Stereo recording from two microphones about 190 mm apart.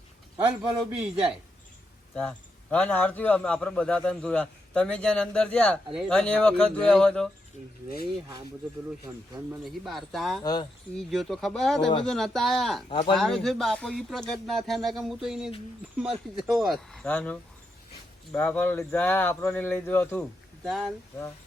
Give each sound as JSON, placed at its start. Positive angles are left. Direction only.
{"t": 0.9, "sound": "a man's voice", "side_deg": -5}
{"t": 2.1, "sound": "a man's voice", "side_deg": 5}
{"t": 8.0, "sound": "speech", "side_deg": -25}
{"t": 9.6, "sound": "a man's voice", "side_deg": 0}
{"t": 10.4, "sound": "speech", "side_deg": 20}
{"t": 11.1, "sound": "a man's voice", "side_deg": 0}
{"t": 12.9, "sound": "speech", "side_deg": 25}
{"t": 13.1, "sound": "a man's voice", "side_deg": 0}